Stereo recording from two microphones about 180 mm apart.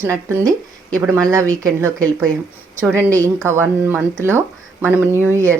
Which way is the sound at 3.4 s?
15° right (ahead or behind).